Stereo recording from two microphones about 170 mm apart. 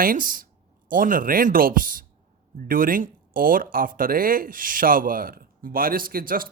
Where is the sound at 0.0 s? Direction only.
55° right (ahead or behind).